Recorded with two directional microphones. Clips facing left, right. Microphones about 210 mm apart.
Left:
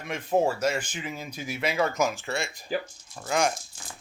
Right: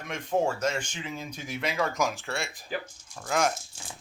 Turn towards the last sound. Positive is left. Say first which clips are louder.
# left 1 dB
turn(degrees=0)  # may be behind; listen again after turning